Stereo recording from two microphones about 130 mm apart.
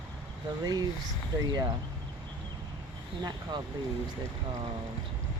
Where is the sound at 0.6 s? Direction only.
30° right (ahead or behind).